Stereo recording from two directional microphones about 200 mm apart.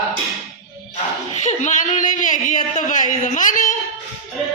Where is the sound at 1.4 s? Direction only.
35° left (ahead or behind).